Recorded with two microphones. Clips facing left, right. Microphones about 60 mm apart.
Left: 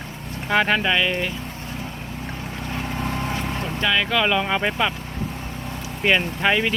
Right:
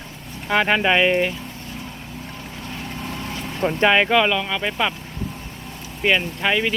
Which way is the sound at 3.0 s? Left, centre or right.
Left.